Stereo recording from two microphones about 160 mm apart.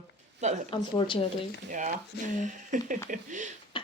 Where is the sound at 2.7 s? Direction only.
50° right (ahead or behind).